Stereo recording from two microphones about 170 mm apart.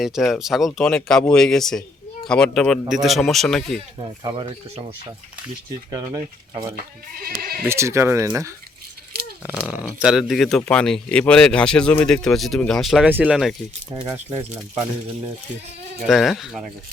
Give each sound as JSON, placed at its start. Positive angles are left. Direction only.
{"t": 0.0, "sound": "speech", "side_deg": 0}
{"t": 3.9, "sound": "speech", "side_deg": -30}
{"t": 5.9, "sound": "speech", "side_deg": -25}
{"t": 7.3, "sound": "speech", "side_deg": -65}
{"t": 7.7, "sound": "speech", "side_deg": -15}
{"t": 14.1, "sound": "speech", "side_deg": -15}
{"t": 16.0, "sound": "speech", "side_deg": 0}